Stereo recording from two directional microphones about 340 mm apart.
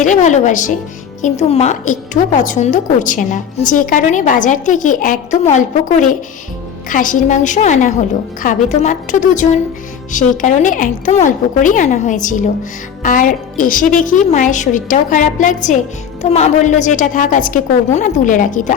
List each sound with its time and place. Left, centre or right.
0.0 s a woman's voice: left